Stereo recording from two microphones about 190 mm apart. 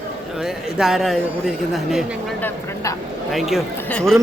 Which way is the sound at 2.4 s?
15° left (ahead or behind).